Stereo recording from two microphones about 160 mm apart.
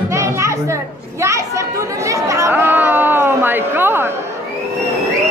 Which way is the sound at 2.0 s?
20° right (ahead or behind).